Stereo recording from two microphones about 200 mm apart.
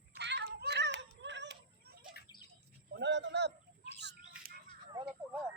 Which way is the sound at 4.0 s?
60° right (ahead or behind).